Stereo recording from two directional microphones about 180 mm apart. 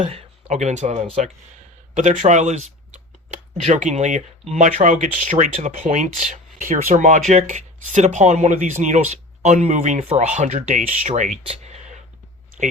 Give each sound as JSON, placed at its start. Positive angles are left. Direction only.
{"t": 0.0, "sound": "speech", "side_deg": -35}